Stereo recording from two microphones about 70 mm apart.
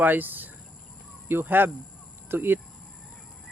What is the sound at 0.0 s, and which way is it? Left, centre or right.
Speech, right.